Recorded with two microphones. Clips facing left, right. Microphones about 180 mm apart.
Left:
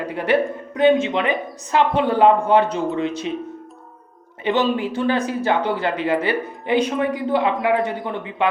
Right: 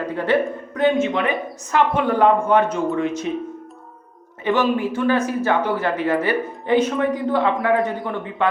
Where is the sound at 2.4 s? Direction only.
35° left (ahead or behind).